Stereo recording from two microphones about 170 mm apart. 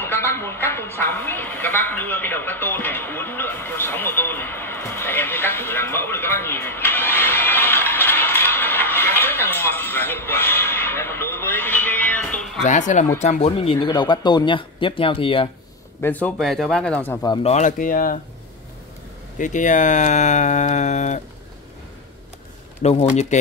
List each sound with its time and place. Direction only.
0.0 s a sound: 15° left (ahead or behind)
12.6 s speech: 45° left (ahead or behind); by 15.5 s 30° left (ahead or behind)
16.0 s speech: 10° left (ahead or behind)
17.4 s speech: 40° left (ahead or behind)
19.3 s speech: 50° left (ahead or behind)
22.8 s speech: 40° left (ahead or behind)